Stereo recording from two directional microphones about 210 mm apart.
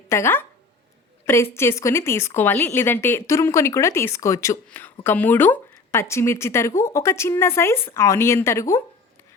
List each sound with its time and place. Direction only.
0.1 s a woman's voice: 10° left (ahead or behind)